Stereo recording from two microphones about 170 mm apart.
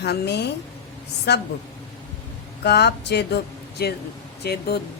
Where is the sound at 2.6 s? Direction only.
80° left.